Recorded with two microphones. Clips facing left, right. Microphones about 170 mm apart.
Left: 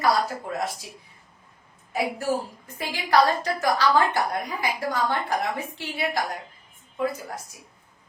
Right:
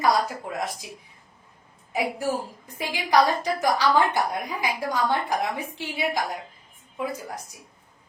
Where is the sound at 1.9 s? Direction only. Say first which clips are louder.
Left 1 dB; 15° right (ahead or behind).